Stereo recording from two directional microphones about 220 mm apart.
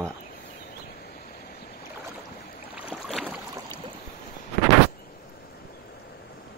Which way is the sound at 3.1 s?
Centre (ahead or behind).